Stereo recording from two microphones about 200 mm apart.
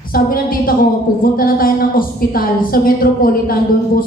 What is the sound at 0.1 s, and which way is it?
A woman's voice, 45° left (ahead or behind).